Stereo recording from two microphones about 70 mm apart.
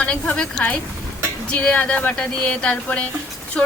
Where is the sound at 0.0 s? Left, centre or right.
Centre.